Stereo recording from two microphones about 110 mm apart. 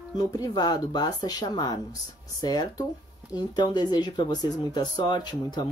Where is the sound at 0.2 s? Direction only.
35° left (ahead or behind).